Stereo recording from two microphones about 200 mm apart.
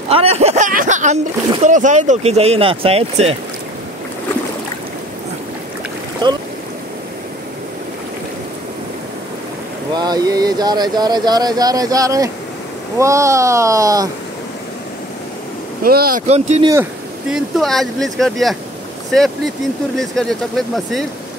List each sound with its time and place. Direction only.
0.1 s speech: 30° right (ahead or behind)
6.2 s speech: 20° right (ahead or behind)
9.9 s speech: 20° right (ahead or behind)
15.8 s speech: 50° right (ahead or behind)
16.3 s speech: 35° right (ahead or behind)
17.3 s speech: centre (ahead or behind)
20.0 s speech: centre (ahead or behind)